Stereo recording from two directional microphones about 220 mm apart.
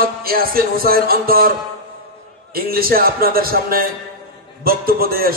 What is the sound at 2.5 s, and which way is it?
Speech, 45° right (ahead or behind).